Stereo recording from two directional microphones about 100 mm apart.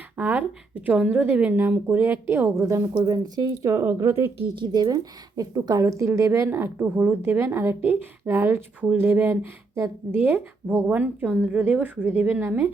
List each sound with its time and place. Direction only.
0.2 s a woman's voice: 15° right (ahead or behind)
2.9 s speech: 40° right (ahead or behind)
4.5 s a woman's voice: 45° right (ahead or behind); by 12.7 s 20° right (ahead or behind)